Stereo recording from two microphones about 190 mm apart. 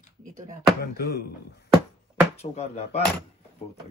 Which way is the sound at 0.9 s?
55° left (ahead or behind).